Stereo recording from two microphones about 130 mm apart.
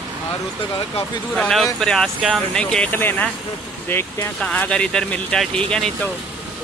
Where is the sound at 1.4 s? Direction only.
5° left (ahead or behind).